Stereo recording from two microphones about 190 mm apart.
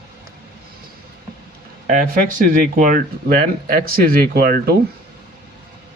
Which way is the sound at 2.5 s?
45° right (ahead or behind).